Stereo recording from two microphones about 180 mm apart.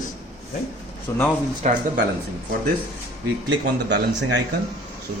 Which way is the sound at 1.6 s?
40° right (ahead or behind).